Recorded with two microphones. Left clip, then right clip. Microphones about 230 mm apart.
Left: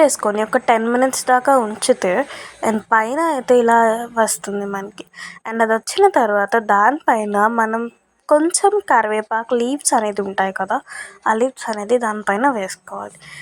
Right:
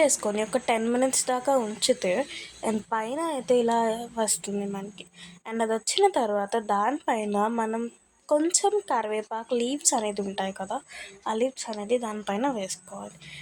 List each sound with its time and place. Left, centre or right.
0.0 s speech: left